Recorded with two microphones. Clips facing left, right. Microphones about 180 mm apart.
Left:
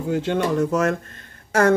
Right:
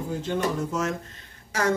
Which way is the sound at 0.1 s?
75° left (ahead or behind).